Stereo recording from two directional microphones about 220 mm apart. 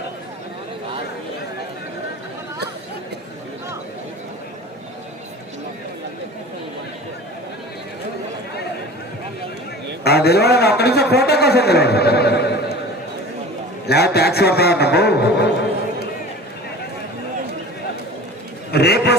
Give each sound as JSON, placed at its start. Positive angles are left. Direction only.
{"t": 10.0, "sound": "a man's voice", "side_deg": 45}
{"t": 13.8, "sound": "a man's voice", "side_deg": 45}
{"t": 18.7, "sound": "a sound", "side_deg": 45}